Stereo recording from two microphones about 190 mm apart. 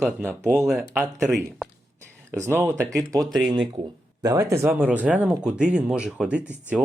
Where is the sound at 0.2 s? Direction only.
15° right (ahead or behind).